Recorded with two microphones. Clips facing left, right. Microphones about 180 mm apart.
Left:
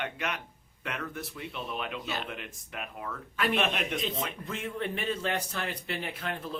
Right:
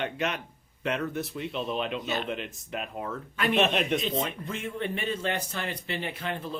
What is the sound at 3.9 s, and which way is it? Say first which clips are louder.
Speech: right 5 dB; 20° right (ahead or behind).